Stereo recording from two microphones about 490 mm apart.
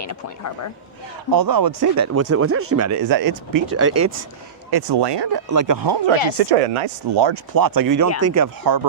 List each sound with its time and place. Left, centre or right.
0.1 s speech: left
1.3 s speech: right
3.8 s speech: right
4.7 s speech: right
5.5 s speech: right
6.4 s speech: right
8.6 s speech: right